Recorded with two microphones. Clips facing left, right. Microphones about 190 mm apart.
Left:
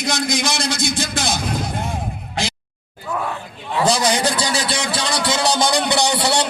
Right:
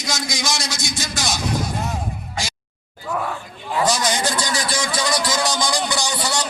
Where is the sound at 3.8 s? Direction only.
30° left (ahead or behind).